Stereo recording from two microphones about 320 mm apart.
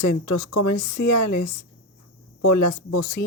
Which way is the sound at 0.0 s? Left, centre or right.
Left.